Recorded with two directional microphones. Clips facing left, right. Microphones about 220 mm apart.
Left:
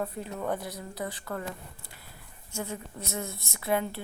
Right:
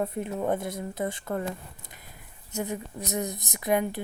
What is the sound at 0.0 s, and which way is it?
A woman's voice, 25° right (ahead or behind).